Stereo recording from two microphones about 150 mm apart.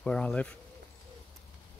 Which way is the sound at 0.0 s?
5° left (ahead or behind).